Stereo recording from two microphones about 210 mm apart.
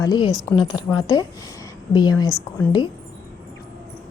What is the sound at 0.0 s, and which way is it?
Speech, 20° left (ahead or behind).